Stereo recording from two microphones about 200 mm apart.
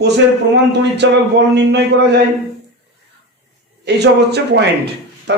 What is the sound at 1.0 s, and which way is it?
Speech, 60° right (ahead or behind).